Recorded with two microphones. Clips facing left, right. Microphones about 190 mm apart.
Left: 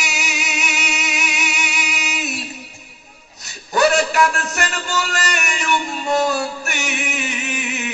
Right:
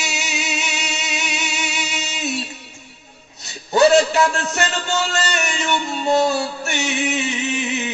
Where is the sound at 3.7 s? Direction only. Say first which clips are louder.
Right 3 dB; 25° right (ahead or behind).